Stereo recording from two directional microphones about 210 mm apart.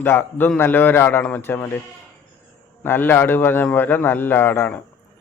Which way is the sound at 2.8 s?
10° left (ahead or behind).